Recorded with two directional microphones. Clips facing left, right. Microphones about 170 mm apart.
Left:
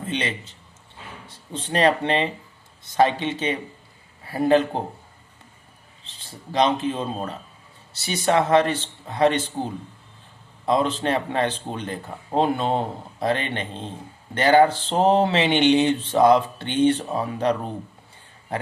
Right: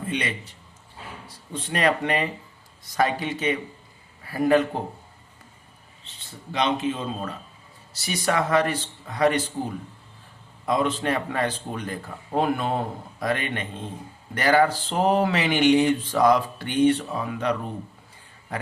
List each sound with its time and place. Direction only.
0.0 s a man's voice: 30° left (ahead or behind)
6.1 s a man's voice: 35° left (ahead or behind)